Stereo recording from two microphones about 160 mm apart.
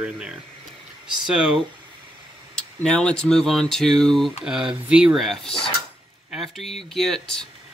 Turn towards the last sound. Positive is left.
turn(degrees=0)  # may be behind; listen again after turning